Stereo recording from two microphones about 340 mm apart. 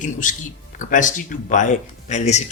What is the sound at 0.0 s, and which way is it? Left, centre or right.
Speech, left.